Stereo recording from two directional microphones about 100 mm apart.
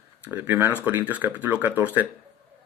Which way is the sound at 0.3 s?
20° right (ahead or behind).